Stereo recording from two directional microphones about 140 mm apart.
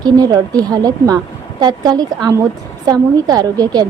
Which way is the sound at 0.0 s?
30° right (ahead or behind).